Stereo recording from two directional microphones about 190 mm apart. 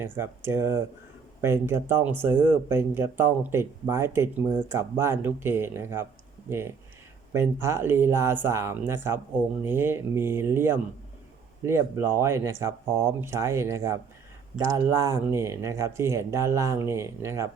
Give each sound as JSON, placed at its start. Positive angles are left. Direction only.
{"t": 0.0, "sound": "speech", "side_deg": -10}